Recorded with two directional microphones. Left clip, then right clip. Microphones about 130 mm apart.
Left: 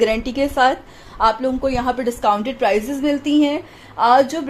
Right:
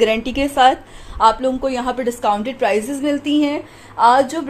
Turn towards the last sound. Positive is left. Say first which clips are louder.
# right 1 dB
turn(degrees=0)  # may be behind; listen again after turning